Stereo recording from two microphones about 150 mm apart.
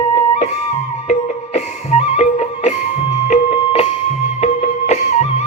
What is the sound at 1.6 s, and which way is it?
Music, 50° left (ahead or behind).